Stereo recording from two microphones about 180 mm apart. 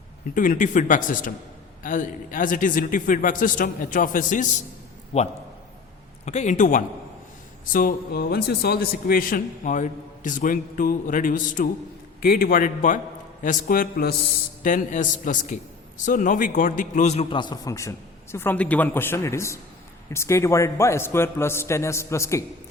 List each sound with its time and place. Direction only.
0.3 s a man's voice: 50° left (ahead or behind)
5.1 s a man's voice: 35° left (ahead or behind); by 14.2 s 55° left (ahead or behind)
14.6 s a man's voice: 45° left (ahead or behind); by 22.4 s 15° left (ahead or behind)